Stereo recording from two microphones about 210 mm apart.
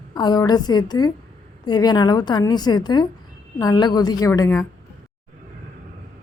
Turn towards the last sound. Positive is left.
turn(degrees=15)  # may be behind; listen again after turning